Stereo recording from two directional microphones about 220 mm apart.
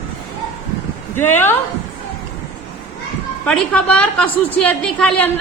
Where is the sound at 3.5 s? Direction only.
5° left (ahead or behind).